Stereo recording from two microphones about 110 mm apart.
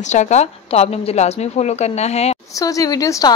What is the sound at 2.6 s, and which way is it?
Speech, 35° left (ahead or behind).